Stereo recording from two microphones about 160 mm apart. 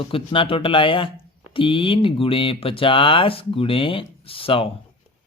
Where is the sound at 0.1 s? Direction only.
35° left (ahead or behind).